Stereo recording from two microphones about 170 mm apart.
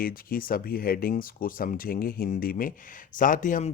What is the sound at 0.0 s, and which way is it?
Speech, 55° left (ahead or behind).